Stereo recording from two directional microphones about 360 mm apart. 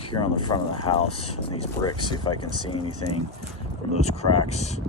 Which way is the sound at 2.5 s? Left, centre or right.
Left.